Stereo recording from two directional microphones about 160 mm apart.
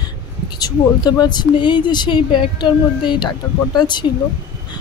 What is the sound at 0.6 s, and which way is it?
A woman's voice, 25° left (ahead or behind).